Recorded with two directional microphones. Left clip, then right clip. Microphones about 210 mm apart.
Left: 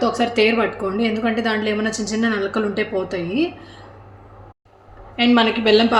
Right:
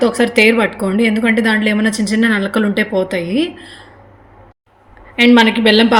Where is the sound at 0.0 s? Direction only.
40° right (ahead or behind).